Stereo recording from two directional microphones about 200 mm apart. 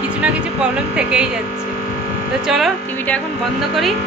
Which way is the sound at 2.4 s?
Centre (ahead or behind).